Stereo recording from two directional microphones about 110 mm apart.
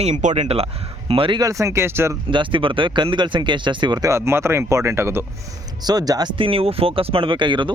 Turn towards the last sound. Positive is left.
turn(degrees=-45)  # may be behind; listen again after turning